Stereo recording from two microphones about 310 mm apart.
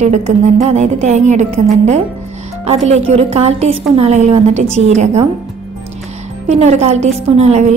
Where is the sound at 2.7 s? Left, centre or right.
Right.